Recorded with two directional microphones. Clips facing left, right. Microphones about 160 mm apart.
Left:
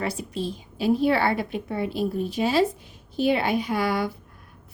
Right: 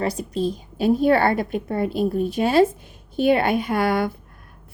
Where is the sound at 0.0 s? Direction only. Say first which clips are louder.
Right 5 dB; 40° right (ahead or behind).